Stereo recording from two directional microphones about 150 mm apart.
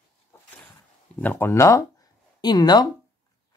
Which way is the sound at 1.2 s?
15° left (ahead or behind).